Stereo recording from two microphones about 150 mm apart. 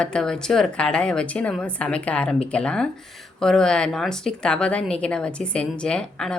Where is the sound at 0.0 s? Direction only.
5° left (ahead or behind).